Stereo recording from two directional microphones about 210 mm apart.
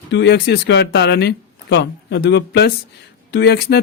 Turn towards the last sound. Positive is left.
turn(degrees=55)  # may be behind; listen again after turning